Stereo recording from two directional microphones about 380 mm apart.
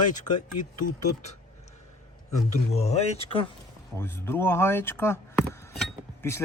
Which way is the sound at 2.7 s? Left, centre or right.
Centre.